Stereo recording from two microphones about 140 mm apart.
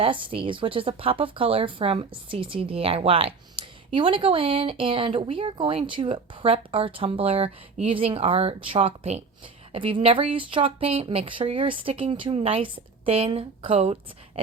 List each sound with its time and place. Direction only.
0.0 s speech: 40° right (ahead or behind)